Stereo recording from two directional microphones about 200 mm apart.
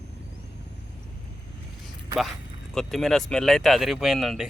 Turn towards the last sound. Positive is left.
turn(degrees=0)  # may be behind; listen again after turning